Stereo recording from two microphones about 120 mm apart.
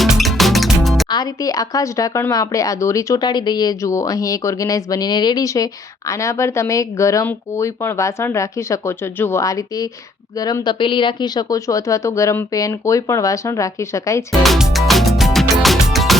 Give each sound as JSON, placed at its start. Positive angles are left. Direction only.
{"t": 0.0, "sound": "music", "side_deg": 0}
{"t": 1.1, "sound": "speech", "side_deg": 30}
{"t": 14.4, "sound": "music", "side_deg": 0}